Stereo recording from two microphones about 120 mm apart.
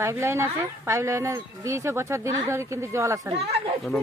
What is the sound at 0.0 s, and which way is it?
Speech, 25° right (ahead or behind).